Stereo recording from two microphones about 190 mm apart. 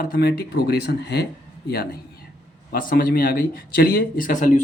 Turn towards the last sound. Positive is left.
turn(degrees=45)  # may be behind; listen again after turning